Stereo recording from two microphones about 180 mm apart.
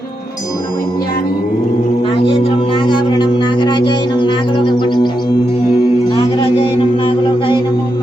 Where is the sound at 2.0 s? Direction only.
30° left (ahead or behind).